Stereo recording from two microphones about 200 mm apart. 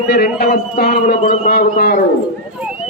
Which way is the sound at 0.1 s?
50° left (ahead or behind).